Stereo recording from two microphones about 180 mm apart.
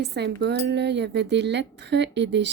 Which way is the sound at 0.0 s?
65° right (ahead or behind).